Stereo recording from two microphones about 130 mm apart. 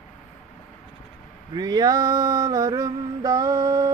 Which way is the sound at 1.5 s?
30° right (ahead or behind).